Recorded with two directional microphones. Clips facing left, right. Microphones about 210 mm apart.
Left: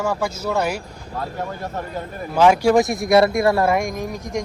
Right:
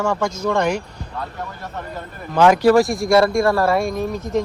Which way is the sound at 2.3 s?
10° left (ahead or behind).